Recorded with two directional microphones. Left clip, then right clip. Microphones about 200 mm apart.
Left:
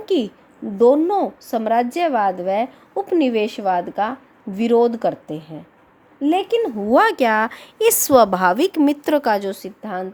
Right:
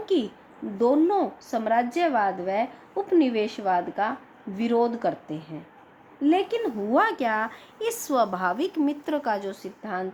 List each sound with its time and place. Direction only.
0.0 s a woman's voice: 45° left (ahead or behind)